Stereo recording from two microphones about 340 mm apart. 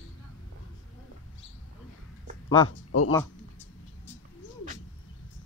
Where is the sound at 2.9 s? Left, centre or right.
Left.